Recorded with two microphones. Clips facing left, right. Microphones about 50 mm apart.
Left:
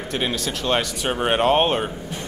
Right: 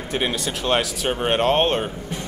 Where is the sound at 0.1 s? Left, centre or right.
Centre.